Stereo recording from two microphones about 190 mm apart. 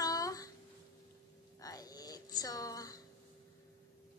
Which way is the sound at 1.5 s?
20° left (ahead or behind).